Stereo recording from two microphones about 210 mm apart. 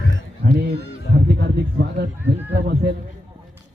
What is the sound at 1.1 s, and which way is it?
Honk, 50° right (ahead or behind).